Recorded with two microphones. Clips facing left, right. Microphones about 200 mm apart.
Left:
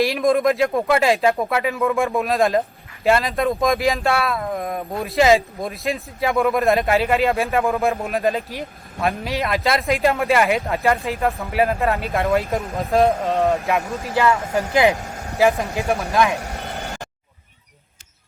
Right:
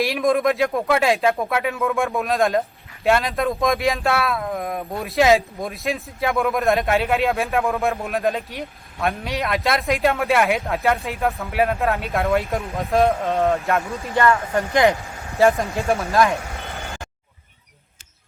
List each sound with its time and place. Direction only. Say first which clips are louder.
0.0 s speech: left 2 dB; centre (ahead or behind)
14.9 s vehicle: left 3 dB; 45° left (ahead or behind)
15.4 s speech: right 1 dB; centre (ahead or behind)
16.4 s vehicle: left 3 dB; 40° left (ahead or behind)